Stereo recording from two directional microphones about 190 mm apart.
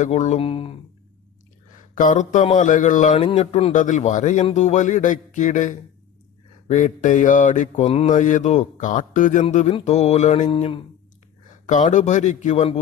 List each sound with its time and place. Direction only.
0.0 s mantra: 40° left (ahead or behind)
2.0 s mantra: 40° left (ahead or behind)
10.5 s speech: 25° left (ahead or behind)
11.6 s mantra: 40° left (ahead or behind)